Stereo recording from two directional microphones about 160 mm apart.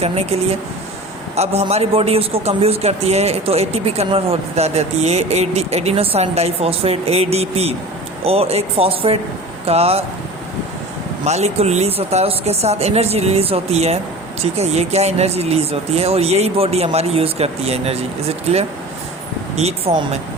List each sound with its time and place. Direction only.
0.0 s a man's voice: 40° right (ahead or behind)
11.3 s a man's voice: 45° right (ahead or behind)